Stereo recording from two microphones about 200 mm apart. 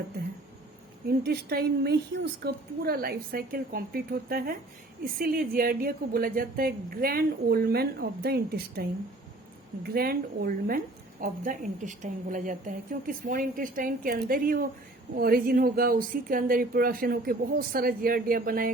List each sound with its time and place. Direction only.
1.0 s a woman's voice: 50° right (ahead or behind)
9.9 s a woman's voice: 50° right (ahead or behind)